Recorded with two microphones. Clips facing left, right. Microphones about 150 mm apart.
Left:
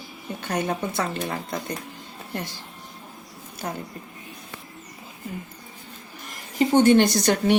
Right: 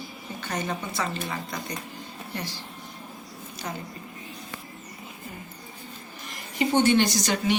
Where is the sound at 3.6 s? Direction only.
45° left (ahead or behind).